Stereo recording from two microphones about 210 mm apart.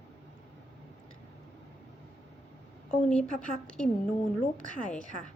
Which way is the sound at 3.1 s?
5° left (ahead or behind).